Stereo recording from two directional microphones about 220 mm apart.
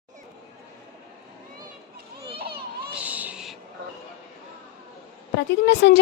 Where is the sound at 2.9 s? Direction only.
5° right (ahead or behind).